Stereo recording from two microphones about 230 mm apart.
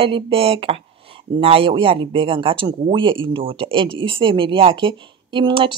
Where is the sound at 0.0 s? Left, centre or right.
Right.